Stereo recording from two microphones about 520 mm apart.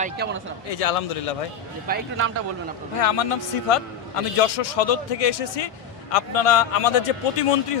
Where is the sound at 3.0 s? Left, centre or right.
Left.